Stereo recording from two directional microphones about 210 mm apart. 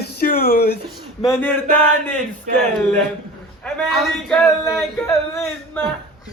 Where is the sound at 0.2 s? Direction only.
45° left (ahead or behind).